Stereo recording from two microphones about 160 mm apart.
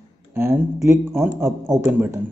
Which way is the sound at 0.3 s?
15° right (ahead or behind).